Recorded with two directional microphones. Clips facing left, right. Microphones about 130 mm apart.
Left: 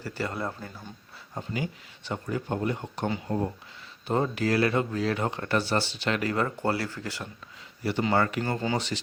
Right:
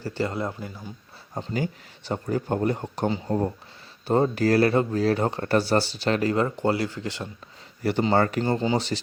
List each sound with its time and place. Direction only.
0.0 s speech: 25° right (ahead or behind)
1.3 s speech: 40° right (ahead or behind); by 7.3 s 25° right (ahead or behind)
8.0 s speech: 35° right (ahead or behind)